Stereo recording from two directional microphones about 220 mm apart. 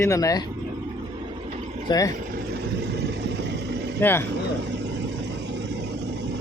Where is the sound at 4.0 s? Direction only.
10° left (ahead or behind).